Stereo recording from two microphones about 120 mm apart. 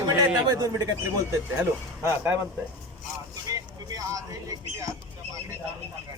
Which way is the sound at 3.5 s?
30° right (ahead or behind).